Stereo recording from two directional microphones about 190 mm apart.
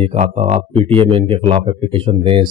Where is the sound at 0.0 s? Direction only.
35° right (ahead or behind).